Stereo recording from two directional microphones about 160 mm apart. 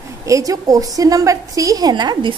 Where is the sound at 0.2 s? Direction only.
20° right (ahead or behind).